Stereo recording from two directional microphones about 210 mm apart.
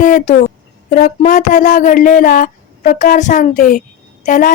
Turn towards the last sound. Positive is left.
turn(degrees=40)  # may be behind; listen again after turning